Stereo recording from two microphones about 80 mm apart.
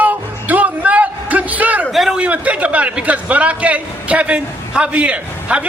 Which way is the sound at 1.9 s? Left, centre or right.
Centre.